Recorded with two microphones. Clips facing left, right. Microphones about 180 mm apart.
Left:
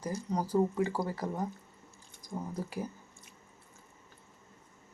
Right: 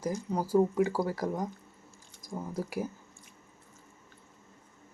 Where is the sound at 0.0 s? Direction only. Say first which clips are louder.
Right 2 dB; 10° right (ahead or behind).